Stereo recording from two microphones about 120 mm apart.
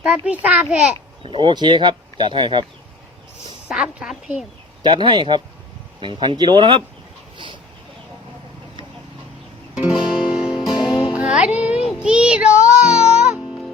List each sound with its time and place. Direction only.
0.0 s a child's voice: 10° right (ahead or behind)
1.2 s speech: 45° right (ahead or behind)
3.7 s a woman's voice: 5° right (ahead or behind)
4.8 s speech: 40° right (ahead or behind)
7.3 s a sound: 40° right (ahead or behind)
9.7 s music: 5° right (ahead or behind)